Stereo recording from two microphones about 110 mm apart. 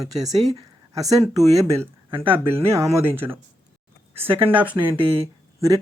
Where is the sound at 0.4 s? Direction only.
65° right (ahead or behind).